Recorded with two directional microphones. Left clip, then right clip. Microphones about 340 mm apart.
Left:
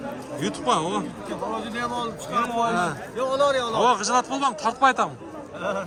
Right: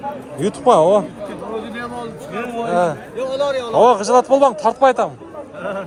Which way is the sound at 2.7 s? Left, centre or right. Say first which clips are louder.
Right 8 dB; centre.